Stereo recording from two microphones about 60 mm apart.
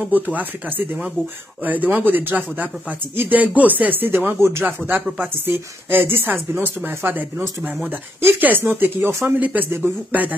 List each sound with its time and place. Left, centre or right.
0.1 s a woman's voice: right
4.4 s speech: right
5.2 s a woman's voice: right
7.6 s a woman's voice: right
9.4 s speech: right
9.7 s a woman's voice: right